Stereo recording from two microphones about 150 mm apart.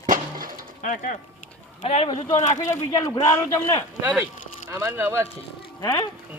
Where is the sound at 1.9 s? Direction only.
40° left (ahead or behind).